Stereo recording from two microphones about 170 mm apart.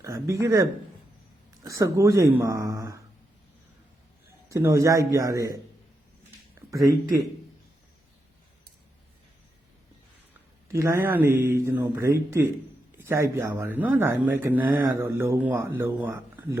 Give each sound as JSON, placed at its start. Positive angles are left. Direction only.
{"t": 0.0, "sound": "speech", "side_deg": -15}
{"t": 4.4, "sound": "speech", "side_deg": -20}
{"t": 6.7, "sound": "speech", "side_deg": -20}
{"t": 10.7, "sound": "speech", "side_deg": -15}